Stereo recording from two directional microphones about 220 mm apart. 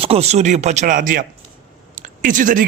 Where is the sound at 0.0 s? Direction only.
25° right (ahead or behind).